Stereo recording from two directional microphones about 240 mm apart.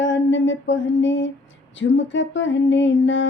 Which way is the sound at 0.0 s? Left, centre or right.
Left.